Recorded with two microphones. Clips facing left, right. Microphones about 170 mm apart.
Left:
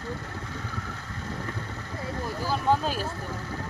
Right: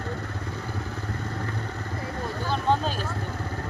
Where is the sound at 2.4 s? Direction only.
5° left (ahead or behind).